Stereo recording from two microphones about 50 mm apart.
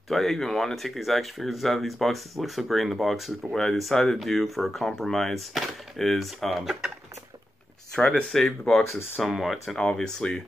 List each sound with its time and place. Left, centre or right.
0.1 s speech: centre
3.5 s speech: centre
8.0 s speech: left
8.3 s speech: centre
9.2 s speech: centre
9.8 s speech: centre